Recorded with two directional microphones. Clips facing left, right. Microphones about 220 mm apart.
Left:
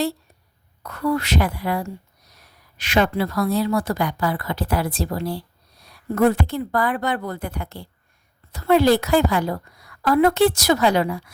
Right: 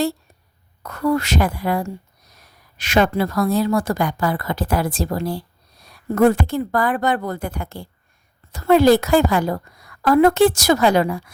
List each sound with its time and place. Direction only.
0.8 s a woman's voice: 45° right (ahead or behind)